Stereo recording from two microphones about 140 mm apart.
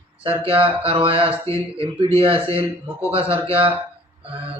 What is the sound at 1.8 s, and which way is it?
Speech, 40° right (ahead or behind).